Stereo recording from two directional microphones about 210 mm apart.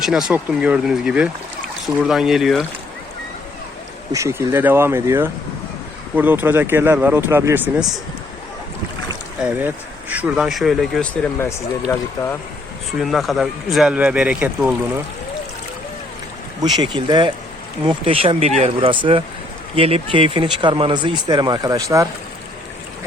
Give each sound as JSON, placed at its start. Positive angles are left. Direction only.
{"t": 0.0, "sound": "speech", "side_deg": 0}
{"t": 4.1, "sound": "speech", "side_deg": -15}
{"t": 9.4, "sound": "speech", "side_deg": -10}
{"t": 13.0, "sound": "speech", "side_deg": 0}
{"t": 16.6, "sound": "speech", "side_deg": -20}